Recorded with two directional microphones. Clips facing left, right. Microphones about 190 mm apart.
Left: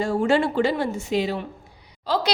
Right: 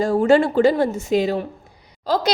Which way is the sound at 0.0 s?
40° right (ahead or behind).